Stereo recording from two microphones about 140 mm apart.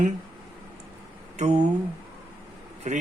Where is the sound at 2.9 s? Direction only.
60° right (ahead or behind).